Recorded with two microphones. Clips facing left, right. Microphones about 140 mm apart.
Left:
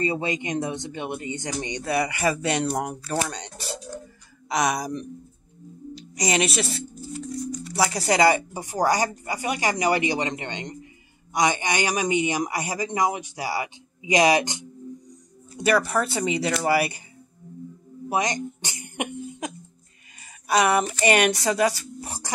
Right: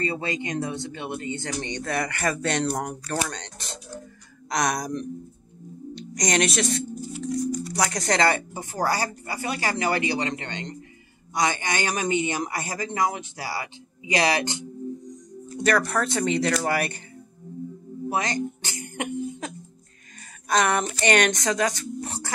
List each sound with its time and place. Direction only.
0.0 s speech: 15° left (ahead or behind)
18.1 s speech: 20° left (ahead or behind)